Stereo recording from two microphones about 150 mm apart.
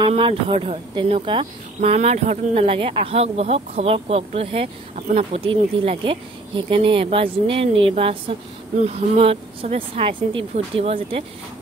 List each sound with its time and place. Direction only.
0.0 s speech: 40° right (ahead or behind)
5.0 s speech: 55° right (ahead or behind)
5.4 s speech: 35° right (ahead or behind)